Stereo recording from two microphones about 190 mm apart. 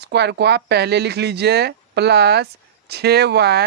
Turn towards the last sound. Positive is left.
turn(degrees=-60)  # may be behind; listen again after turning